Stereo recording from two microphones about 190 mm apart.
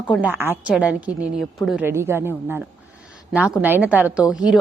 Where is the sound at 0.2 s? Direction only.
10° right (ahead or behind).